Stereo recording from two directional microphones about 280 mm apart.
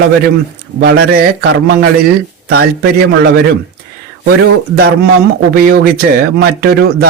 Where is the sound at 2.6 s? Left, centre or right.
Right.